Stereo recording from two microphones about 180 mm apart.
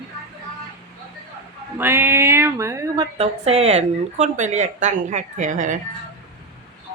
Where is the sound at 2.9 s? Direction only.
35° right (ahead or behind).